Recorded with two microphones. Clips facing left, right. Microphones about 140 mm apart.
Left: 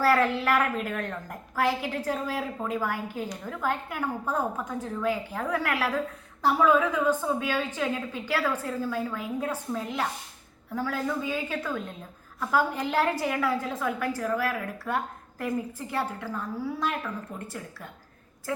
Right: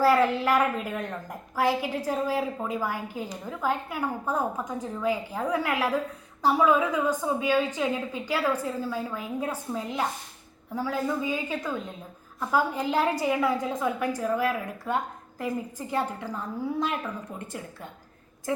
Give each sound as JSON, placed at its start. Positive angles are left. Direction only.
{"t": 0.0, "sound": "a woman's voice", "side_deg": -15}